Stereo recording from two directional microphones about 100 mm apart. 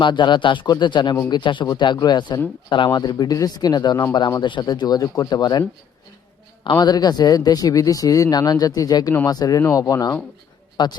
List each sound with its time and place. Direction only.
0.0 s speech: 50° left (ahead or behind)
2.9 s speech: 40° left (ahead or behind)
6.7 s speech: 45° left (ahead or behind)